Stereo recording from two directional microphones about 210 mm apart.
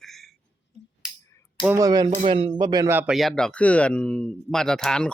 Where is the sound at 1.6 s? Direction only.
15° right (ahead or behind).